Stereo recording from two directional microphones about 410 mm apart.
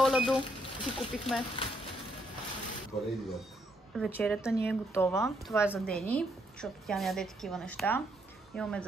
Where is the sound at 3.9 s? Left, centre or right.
Centre.